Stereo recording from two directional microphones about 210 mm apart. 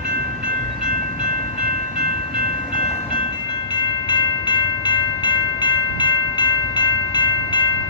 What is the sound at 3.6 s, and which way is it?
Train, 20° left (ahead or behind).